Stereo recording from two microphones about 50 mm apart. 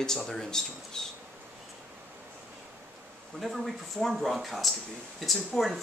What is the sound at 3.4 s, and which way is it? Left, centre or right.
Speech, centre.